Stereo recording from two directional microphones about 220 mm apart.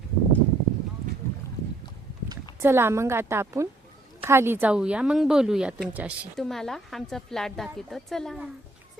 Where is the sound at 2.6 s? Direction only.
10° right (ahead or behind).